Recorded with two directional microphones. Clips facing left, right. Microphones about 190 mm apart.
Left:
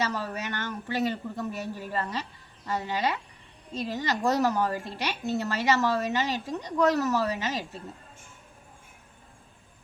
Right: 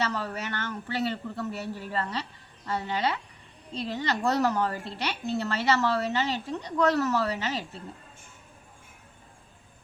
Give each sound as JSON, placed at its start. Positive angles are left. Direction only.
{"t": 0.0, "sound": "a woman's voice", "side_deg": 15}